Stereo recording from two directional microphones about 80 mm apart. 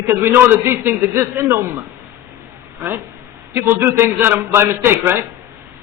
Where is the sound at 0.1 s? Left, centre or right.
Right.